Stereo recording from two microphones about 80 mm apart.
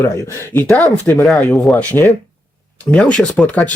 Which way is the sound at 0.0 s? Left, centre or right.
Left.